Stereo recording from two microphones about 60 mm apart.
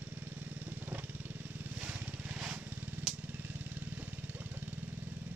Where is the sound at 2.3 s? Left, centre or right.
Right.